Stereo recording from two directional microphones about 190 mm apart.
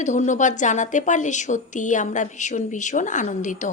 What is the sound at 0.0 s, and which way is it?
A woman's voice, 40° left (ahead or behind).